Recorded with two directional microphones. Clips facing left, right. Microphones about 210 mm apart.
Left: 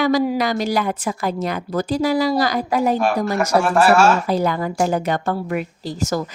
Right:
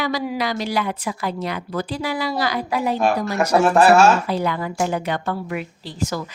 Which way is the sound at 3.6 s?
20° right (ahead or behind).